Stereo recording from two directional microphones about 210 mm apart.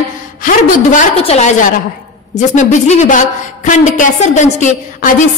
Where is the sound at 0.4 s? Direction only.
40° left (ahead or behind).